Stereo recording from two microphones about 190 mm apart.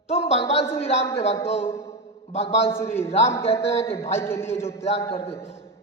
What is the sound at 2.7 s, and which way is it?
A man's voice, 10° left (ahead or behind).